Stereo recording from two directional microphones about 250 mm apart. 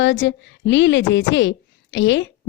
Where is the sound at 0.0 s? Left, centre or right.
Left.